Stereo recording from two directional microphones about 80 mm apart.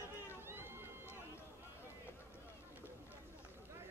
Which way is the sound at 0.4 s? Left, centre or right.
Right.